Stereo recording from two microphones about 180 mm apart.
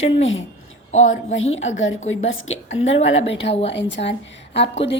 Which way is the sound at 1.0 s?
90° left.